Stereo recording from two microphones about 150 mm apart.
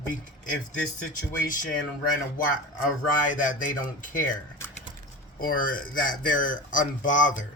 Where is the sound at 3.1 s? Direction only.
60° left (ahead or behind).